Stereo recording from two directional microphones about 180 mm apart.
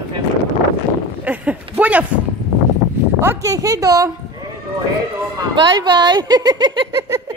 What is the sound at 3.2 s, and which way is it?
Speech, 15° right (ahead or behind).